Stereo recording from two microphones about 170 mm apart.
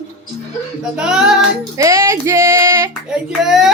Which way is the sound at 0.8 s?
5° right (ahead or behind).